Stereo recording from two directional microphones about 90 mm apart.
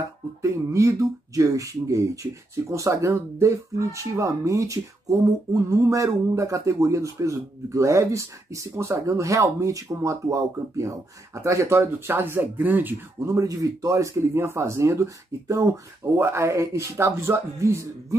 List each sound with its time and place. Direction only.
0.4 s speech: 35° right (ahead or behind)
13.2 s speech: 35° right (ahead or behind)